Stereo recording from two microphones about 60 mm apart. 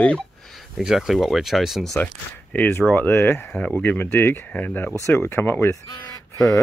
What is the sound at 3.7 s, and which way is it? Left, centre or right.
Speech, left.